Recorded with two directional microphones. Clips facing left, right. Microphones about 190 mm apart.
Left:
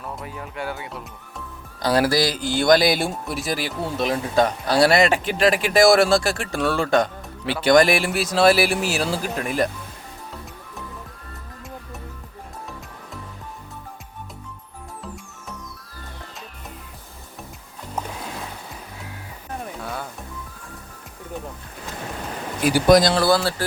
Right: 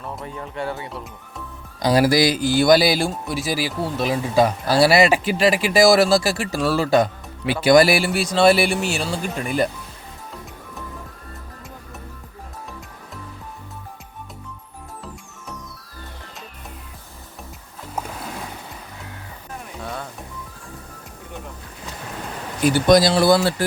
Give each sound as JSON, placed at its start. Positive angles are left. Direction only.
{"t": 0.3, "sound": "speech", "side_deg": 5}
{"t": 1.8, "sound": "speech", "side_deg": -10}
{"t": 17.9, "sound": "music", "side_deg": -5}
{"t": 19.8, "sound": "music", "side_deg": 0}
{"t": 22.6, "sound": "speech", "side_deg": 5}
{"t": 23.1, "sound": "speech", "side_deg": -20}